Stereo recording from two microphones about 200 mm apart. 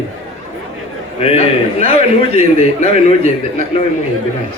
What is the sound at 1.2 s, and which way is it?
A man's voice, 30° left (ahead or behind).